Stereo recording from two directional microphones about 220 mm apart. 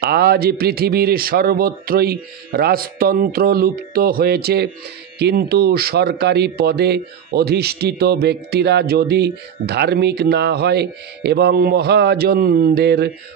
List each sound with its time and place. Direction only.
0.0 s speech: 45° right (ahead or behind)